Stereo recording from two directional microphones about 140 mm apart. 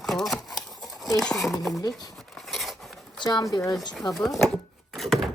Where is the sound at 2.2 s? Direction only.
Centre (ahead or behind).